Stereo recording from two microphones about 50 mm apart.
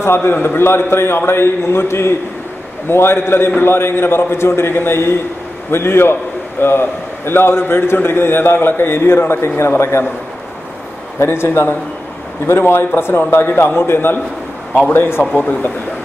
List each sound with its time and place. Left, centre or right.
0.0 s a man's voice: left
11.1 s a man's voice: left
13.2 s a man's voice: left
15.3 s speech: left